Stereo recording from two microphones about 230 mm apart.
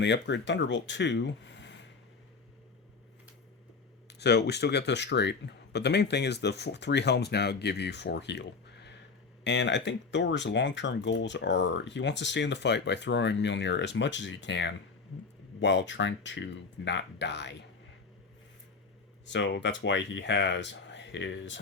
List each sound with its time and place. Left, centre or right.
0.0 s speech: left
4.2 s speech: left
19.2 s speech: left